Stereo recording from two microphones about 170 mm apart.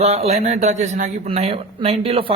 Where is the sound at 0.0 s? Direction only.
40° right (ahead or behind).